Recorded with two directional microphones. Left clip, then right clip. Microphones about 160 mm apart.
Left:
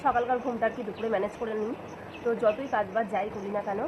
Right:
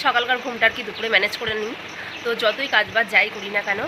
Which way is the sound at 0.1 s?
25° right (ahead or behind).